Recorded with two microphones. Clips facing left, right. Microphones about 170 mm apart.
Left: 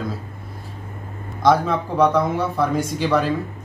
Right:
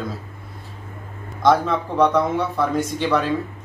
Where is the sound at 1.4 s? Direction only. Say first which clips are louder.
Even; centre (ahead or behind).